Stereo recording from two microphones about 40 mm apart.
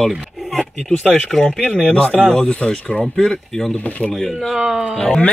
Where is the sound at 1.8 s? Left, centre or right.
Left.